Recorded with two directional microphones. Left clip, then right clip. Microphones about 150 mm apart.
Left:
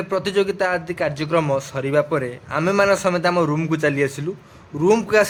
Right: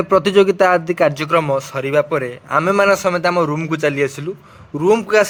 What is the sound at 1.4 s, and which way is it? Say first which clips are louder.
A man's voice: right 3 dB; 35° right (ahead or behind).